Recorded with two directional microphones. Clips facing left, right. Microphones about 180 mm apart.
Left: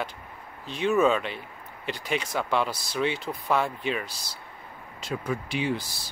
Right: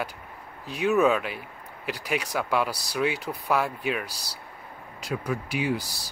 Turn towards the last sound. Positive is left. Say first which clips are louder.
# right 1 dB
turn(degrees=-5)  # may be behind; listen again after turning